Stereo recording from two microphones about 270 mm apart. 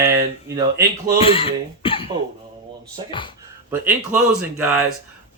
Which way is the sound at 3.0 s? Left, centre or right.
Centre.